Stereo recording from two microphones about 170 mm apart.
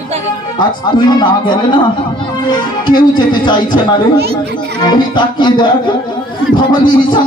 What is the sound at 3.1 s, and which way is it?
Speech, 25° left (ahead or behind).